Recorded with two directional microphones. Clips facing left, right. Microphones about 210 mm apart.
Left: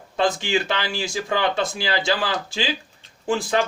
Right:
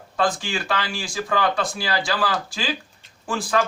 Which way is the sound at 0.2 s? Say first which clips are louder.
Left 2 dB; 25° left (ahead or behind).